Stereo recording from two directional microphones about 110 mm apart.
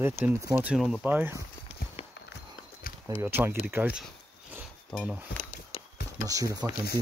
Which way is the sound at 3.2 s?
20° right (ahead or behind).